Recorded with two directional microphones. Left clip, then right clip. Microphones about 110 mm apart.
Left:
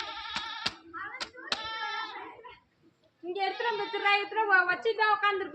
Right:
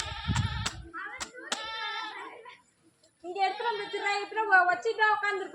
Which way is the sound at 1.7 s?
35° right (ahead or behind).